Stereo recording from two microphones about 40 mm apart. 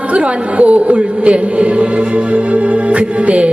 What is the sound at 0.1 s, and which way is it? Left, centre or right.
Speech, right.